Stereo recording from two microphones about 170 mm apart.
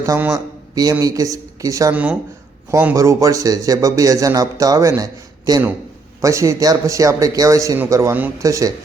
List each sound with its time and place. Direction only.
0.0 s a man's voice: 20° right (ahead or behind)
1.9 s speech: 10° right (ahead or behind)